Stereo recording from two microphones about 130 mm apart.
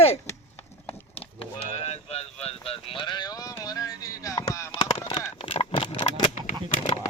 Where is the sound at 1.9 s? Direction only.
55° left (ahead or behind); by 4.4 s 25° left (ahead or behind).